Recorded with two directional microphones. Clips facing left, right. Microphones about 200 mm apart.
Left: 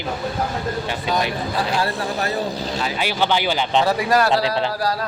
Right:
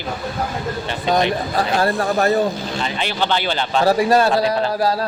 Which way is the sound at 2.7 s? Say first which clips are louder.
Even; 5° left (ahead or behind).